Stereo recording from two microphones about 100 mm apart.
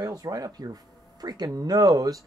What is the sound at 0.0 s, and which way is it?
Speech, 35° right (ahead or behind).